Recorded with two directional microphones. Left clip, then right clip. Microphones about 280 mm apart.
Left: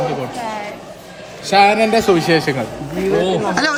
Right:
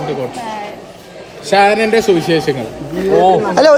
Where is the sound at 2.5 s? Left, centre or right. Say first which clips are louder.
Right 2 dB; left.